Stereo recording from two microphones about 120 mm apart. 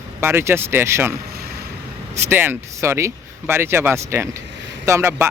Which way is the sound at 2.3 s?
15° right (ahead or behind).